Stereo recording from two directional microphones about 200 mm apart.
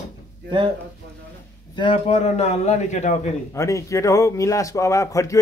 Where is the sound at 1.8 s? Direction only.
30° left (ahead or behind).